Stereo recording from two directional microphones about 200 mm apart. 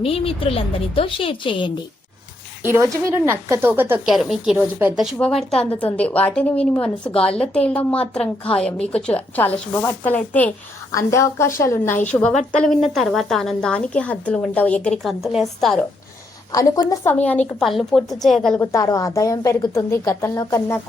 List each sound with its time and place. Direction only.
0.0 s a woman's voice: 30° left (ahead or behind)
3.2 s speech: 10° right (ahead or behind)
5.1 s a woman's voice: 5° left (ahead or behind)
7.0 s a woman's voice: 25° left (ahead or behind)
7.3 s a woman's voice: 5° left (ahead or behind)
16.5 s a woman's voice: 15° left (ahead or behind)
18.7 s a woman's voice: 15° left (ahead or behind)